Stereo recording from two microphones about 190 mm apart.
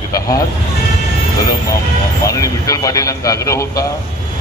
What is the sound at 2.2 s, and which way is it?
Speech, 15° left (ahead or behind).